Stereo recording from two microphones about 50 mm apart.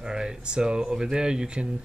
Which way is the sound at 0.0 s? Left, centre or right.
Centre.